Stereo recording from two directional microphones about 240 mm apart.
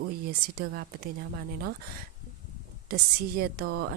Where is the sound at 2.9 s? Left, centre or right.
Right.